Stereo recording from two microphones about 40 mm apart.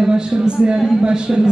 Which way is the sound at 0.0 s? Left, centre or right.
Centre.